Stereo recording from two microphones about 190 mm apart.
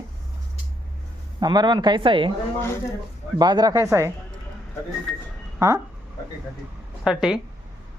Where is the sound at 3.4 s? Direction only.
25° right (ahead or behind).